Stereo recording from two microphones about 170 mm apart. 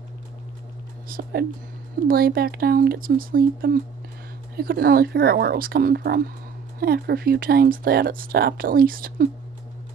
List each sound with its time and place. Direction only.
1.0 s speech: 60° right (ahead or behind)